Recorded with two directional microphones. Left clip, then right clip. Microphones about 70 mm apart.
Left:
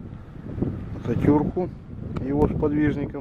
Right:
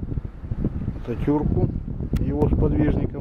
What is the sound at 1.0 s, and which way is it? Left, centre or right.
Speech, left.